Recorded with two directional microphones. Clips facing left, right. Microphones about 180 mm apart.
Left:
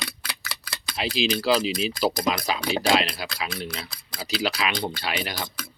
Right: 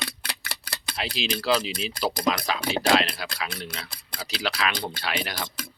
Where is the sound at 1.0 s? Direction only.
5° left (ahead or behind).